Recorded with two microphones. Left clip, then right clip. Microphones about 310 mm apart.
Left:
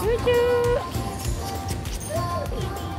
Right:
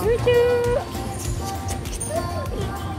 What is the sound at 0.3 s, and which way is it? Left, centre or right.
Music, left.